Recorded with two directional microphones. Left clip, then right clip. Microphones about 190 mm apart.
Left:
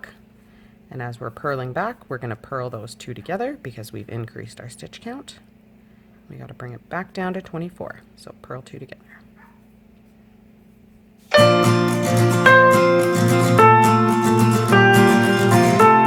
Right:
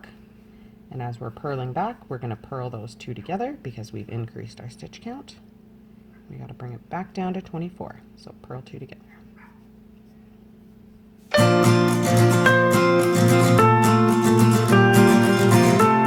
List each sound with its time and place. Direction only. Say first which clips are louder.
0.9 s speech: left 3 dB; 30° left (ahead or behind)
6.4 s speech: left 4 dB; 25° left (ahead or behind)
11.3 s music: left 4 dB; centre (ahead or behind)